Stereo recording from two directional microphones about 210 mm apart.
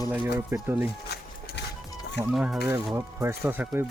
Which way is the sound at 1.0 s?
50° left (ahead or behind).